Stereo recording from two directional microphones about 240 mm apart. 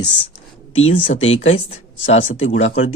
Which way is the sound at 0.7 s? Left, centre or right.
Left.